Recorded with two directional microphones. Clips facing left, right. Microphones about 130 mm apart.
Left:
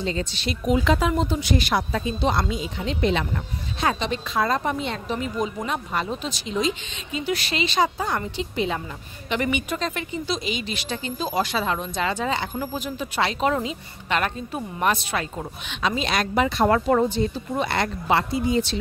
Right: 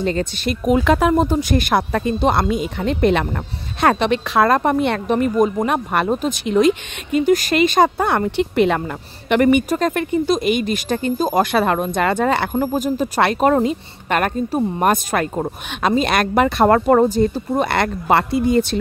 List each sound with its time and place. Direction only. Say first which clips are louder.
0.0 s a woman's voice: right 7 dB; 55° right (ahead or behind)
9.3 s a woman's voice: right 10 dB; 50° right (ahead or behind)